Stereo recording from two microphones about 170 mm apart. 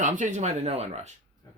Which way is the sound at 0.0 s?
50° right (ahead or behind).